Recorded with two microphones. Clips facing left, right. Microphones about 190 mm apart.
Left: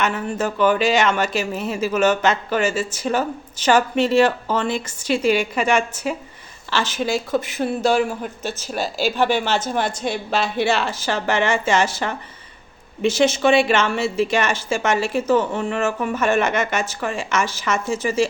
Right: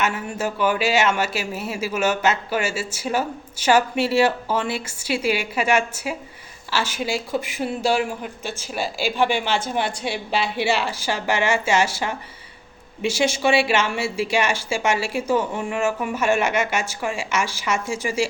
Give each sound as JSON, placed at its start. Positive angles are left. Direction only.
{"t": 0.0, "sound": "speech", "side_deg": -10}